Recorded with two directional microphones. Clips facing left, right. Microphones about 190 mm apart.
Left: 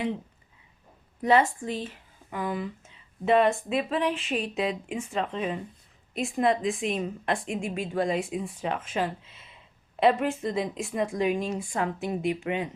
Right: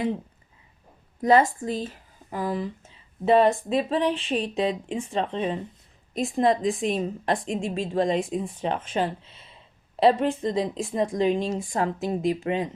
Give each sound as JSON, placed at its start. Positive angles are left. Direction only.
{"t": 1.2, "sound": "a woman's voice", "side_deg": -40}